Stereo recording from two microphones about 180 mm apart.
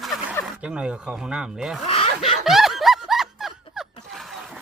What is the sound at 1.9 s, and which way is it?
Snicker, 30° left (ahead or behind).